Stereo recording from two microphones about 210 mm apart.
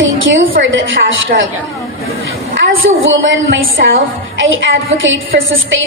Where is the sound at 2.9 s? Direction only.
65° right (ahead or behind).